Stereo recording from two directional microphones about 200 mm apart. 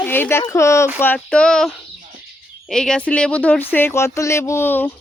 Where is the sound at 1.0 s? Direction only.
5° left (ahead or behind).